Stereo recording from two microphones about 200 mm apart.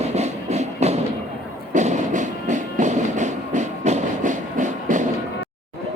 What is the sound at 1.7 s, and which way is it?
Music, 35° right (ahead or behind).